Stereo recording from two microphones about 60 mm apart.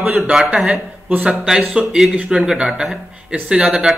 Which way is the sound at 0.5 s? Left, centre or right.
Centre.